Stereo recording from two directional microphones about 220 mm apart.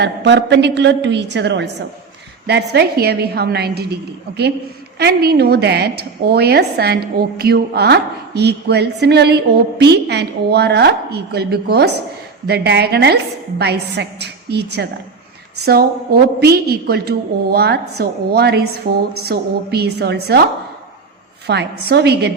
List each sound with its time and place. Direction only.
0.0 s a woman's voice: 55° right (ahead or behind)
4.9 s a woman's voice: 45° right (ahead or behind)
21.4 s a woman's voice: 50° right (ahead or behind)